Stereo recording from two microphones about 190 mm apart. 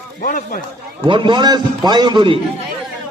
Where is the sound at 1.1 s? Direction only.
25° right (ahead or behind).